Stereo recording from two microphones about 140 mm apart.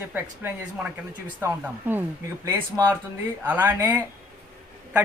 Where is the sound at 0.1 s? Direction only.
10° right (ahead or behind).